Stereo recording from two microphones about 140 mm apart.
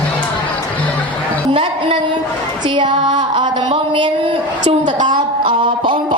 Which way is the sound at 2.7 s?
35° right (ahead or behind).